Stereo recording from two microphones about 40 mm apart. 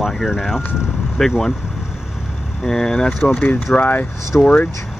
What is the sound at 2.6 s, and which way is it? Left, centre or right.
Speech, centre.